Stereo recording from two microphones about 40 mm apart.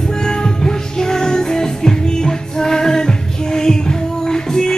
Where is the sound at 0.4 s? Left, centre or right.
Centre.